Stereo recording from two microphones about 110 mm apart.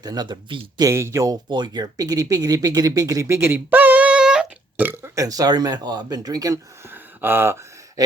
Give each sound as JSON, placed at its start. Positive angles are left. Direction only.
{"t": 0.0, "sound": "speech", "side_deg": -35}
{"t": 0.8, "sound": "speech", "side_deg": -25}
{"t": 1.5, "sound": "speech", "side_deg": -40}
{"t": 4.9, "sound": "speech", "side_deg": -25}
{"t": 6.8, "sound": "a sound", "side_deg": -20}
{"t": 8.0, "sound": "gasp", "side_deg": -35}